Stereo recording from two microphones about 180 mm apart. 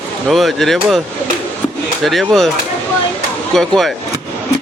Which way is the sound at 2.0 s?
Centre (ahead or behind).